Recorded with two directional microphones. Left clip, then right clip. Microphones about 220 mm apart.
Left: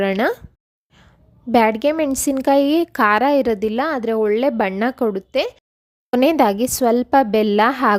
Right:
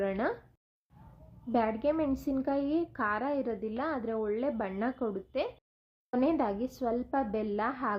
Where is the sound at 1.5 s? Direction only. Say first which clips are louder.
Left 14 dB; 50° left (ahead or behind).